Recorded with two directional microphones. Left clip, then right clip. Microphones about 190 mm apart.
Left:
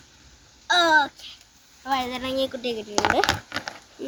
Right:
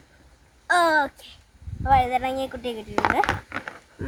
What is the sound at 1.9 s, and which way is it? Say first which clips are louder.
Speech: right 6 dB; 50° right (ahead or behind).